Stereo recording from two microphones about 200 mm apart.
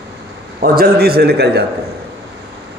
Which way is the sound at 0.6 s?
50° right (ahead or behind).